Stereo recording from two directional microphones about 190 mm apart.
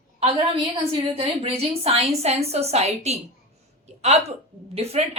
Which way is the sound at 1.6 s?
30° right (ahead or behind).